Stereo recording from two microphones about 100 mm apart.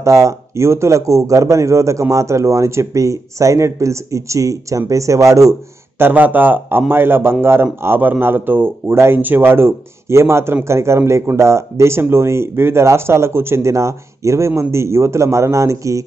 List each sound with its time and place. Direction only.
0.0 s a man's voice: 30° right (ahead or behind)